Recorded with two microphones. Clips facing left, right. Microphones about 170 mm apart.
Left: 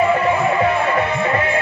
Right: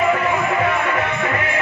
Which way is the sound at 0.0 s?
30° left (ahead or behind).